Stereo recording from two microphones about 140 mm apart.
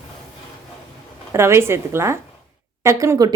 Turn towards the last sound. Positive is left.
turn(degrees=-25)  # may be behind; listen again after turning